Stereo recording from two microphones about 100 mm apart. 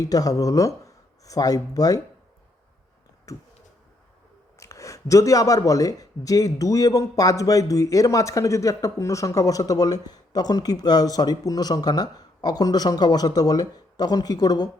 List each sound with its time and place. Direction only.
0.0 s speech: 35° left (ahead or behind)
3.3 s speech: 35° left (ahead or behind)
4.6 s speech: 35° left (ahead or behind)